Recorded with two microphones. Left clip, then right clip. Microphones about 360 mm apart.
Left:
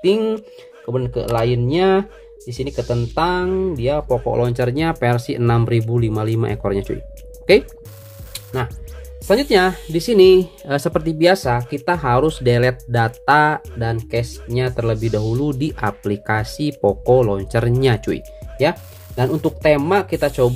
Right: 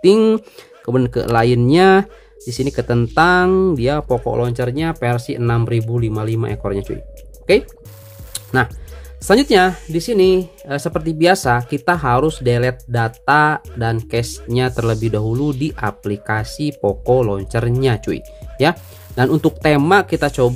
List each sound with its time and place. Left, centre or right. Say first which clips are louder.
0.0 s speech: right 5 dB; centre
9.3 s speech: right 2 dB; centre
9.8 s speech: left 3 dB; centre
18.6 s speech: right 2 dB; centre